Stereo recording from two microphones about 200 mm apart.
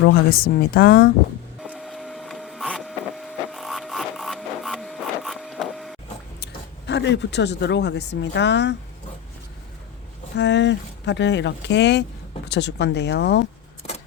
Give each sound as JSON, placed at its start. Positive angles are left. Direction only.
{"t": 0.3, "sound": "speech", "side_deg": 50}
{"t": 1.7, "sound": "printer", "side_deg": 0}
{"t": 6.4, "sound": "speech", "side_deg": 60}
{"t": 10.3, "sound": "speech", "side_deg": 60}